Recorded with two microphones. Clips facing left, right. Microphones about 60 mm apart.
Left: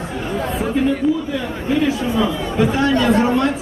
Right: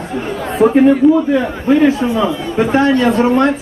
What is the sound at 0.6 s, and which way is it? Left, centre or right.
Speech, right.